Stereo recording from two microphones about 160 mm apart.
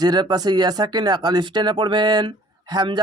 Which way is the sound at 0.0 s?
25° right (ahead or behind).